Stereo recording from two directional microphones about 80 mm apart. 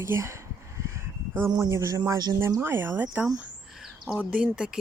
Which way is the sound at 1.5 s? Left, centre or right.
Right.